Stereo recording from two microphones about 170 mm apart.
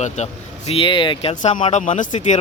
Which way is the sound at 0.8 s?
30° left (ahead or behind).